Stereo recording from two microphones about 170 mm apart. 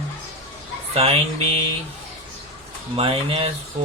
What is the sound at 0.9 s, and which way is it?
Speech, 35° right (ahead or behind).